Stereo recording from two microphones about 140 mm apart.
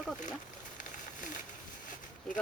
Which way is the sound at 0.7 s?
70° left (ahead or behind).